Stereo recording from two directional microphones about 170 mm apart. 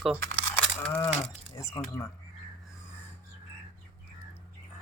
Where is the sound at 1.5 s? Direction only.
20° left (ahead or behind).